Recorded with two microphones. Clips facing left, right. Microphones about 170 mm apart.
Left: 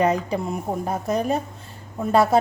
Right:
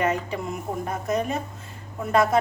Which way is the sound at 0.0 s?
35° left (ahead or behind).